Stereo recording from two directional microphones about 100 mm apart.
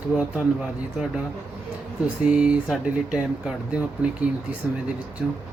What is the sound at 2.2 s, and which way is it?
Speech, 10° right (ahead or behind).